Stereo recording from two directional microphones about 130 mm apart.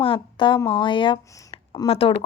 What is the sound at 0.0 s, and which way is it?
A woman's voice, 40° left (ahead or behind).